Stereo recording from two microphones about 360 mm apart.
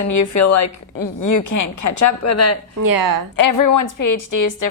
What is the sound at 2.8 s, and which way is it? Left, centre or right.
Speech, right.